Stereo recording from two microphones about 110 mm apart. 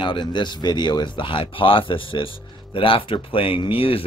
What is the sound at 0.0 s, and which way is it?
Speech, 45° left (ahead or behind).